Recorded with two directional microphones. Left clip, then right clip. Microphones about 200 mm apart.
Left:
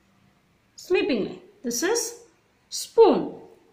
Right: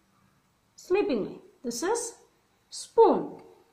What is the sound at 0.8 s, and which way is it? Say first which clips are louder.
Speech: left 3 dB; 5° left (ahead or behind).